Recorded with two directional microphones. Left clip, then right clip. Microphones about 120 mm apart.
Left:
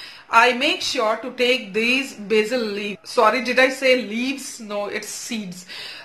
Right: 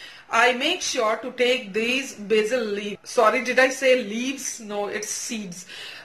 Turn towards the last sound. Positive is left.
turn(degrees=25)  # may be behind; listen again after turning